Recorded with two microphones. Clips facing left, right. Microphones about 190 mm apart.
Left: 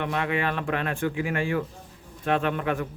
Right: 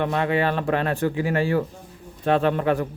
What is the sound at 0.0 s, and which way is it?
Speech, 35° right (ahead or behind).